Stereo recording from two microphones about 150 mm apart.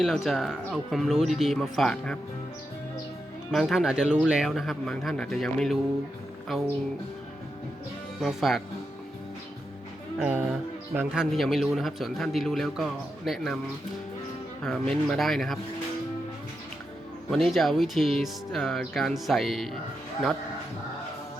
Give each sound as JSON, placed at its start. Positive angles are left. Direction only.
{"t": 0.0, "sound": "speech", "side_deg": 0}
{"t": 3.5, "sound": "speech", "side_deg": 0}
{"t": 8.2, "sound": "speech", "side_deg": 0}
{"t": 10.2, "sound": "speech", "side_deg": -10}
{"t": 14.6, "sound": "speech", "side_deg": 0}
{"t": 17.3, "sound": "speech", "side_deg": 0}